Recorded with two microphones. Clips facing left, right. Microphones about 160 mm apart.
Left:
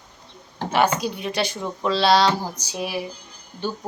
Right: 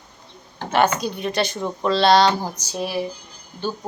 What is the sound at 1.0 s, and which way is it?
A woman's voice, 5° left (ahead or behind).